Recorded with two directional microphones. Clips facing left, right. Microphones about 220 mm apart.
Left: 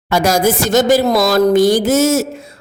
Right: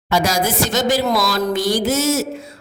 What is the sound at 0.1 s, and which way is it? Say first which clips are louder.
A man's voice: left 5 dB; 50° left (ahead or behind).